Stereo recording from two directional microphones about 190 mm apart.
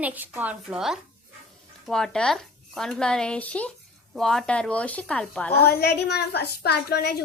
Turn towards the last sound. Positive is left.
turn(degrees=55)  # may be behind; listen again after turning